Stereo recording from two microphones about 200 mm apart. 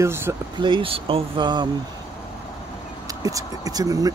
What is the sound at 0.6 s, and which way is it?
Speech, 25° right (ahead or behind).